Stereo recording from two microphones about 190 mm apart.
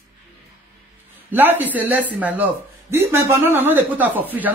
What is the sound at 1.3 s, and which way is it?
Speech, 10° right (ahead or behind).